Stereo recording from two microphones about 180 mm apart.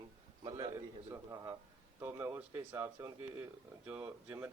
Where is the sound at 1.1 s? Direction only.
15° right (ahead or behind).